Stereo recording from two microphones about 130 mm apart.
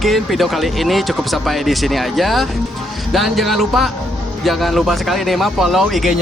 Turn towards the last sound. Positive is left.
turn(degrees=0)  # may be behind; listen again after turning